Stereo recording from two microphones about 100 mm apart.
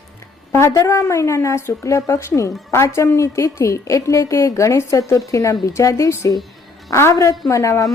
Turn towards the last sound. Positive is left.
turn(degrees=35)  # may be behind; listen again after turning